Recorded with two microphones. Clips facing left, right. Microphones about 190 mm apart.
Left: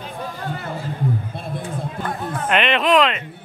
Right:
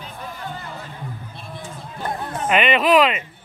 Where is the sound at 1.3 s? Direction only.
55° left (ahead or behind).